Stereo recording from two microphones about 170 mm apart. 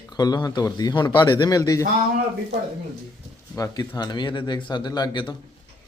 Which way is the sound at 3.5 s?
20° left (ahead or behind).